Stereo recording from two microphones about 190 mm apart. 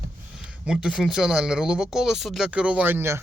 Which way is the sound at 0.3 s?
5° right (ahead or behind).